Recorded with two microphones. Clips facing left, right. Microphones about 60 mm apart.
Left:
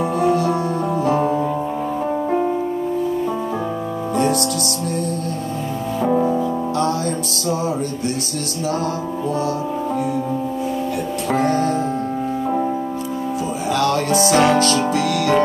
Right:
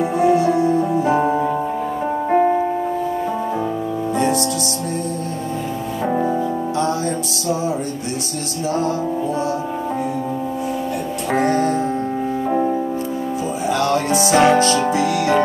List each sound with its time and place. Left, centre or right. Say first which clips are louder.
0.2 s music: right 3 dB; right
0.5 s music: right 4 dB; left
1.0 s music: right 1 dB; right
6.0 s music: left 1 dB; right
11.3 s music: right 1 dB; right
13.7 s music: left 1 dB; right